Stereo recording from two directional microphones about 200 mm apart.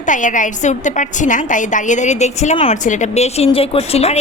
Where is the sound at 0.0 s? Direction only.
40° left (ahead or behind).